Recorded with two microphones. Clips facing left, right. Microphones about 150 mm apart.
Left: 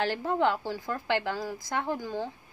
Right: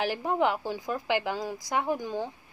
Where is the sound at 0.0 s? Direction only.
15° right (ahead or behind).